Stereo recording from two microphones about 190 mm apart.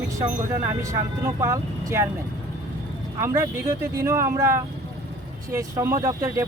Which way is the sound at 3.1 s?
15° right (ahead or behind).